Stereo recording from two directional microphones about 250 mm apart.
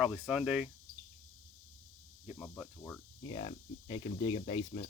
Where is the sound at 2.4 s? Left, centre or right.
Centre.